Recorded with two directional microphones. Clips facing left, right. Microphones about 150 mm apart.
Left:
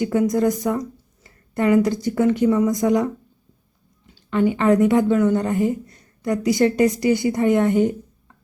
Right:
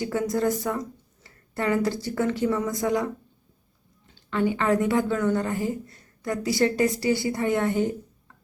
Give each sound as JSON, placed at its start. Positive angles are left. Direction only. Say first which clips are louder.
{"t": 0.0, "sound": "a woman's voice", "louder": "left 6 dB", "side_deg": 15}
{"t": 4.1, "sound": "a woman's voice", "louder": "left 5 dB", "side_deg": 20}